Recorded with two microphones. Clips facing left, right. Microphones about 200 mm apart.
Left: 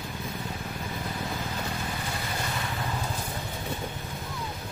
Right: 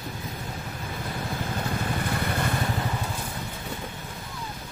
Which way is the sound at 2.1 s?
60° right (ahead or behind).